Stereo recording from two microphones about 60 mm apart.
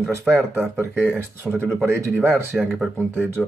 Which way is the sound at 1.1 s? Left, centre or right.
Right.